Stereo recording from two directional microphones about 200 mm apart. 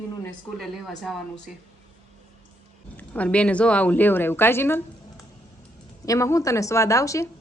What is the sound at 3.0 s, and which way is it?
A woman's voice, 5° left (ahead or behind).